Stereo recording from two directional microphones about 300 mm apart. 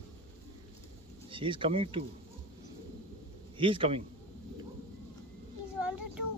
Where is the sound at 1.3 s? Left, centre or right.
Centre.